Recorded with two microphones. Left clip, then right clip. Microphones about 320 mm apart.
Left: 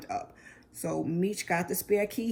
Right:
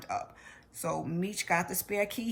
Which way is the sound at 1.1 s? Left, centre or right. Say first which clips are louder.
Right 1 dB; centre.